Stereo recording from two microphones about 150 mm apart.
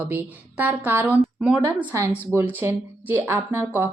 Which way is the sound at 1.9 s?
20° right (ahead or behind).